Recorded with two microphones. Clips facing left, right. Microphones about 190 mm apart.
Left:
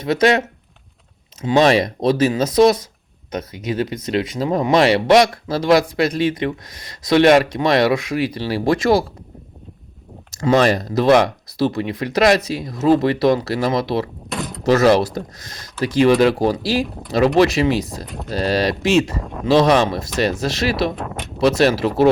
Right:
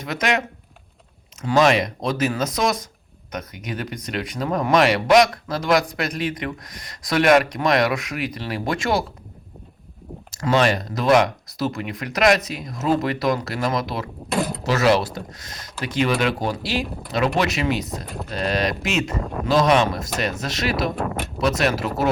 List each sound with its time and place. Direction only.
0.0 s speech: 30° left (ahead or behind)
1.5 s speech: 35° left (ahead or behind)
10.4 s speech: 35° left (ahead or behind)
14.3 s speech: centre (ahead or behind)
14.7 s speech: 45° left (ahead or behind)
21.0 s speech: centre (ahead or behind)
21.4 s speech: 30° left (ahead or behind)